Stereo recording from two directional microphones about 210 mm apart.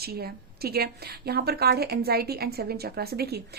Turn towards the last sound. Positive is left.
turn(degrees=-50)  # may be behind; listen again after turning